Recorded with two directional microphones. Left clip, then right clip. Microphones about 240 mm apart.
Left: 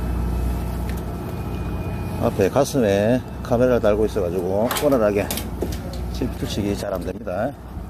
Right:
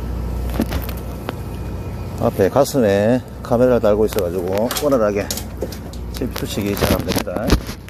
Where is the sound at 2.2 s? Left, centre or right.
Centre.